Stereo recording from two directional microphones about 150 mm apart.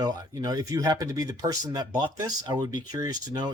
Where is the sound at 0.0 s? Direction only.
25° right (ahead or behind).